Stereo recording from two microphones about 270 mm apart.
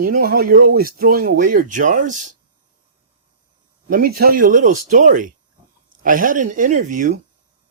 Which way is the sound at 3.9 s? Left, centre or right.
Right.